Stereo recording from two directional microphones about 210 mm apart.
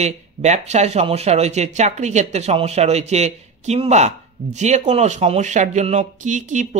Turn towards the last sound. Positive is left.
turn(degrees=-35)  # may be behind; listen again after turning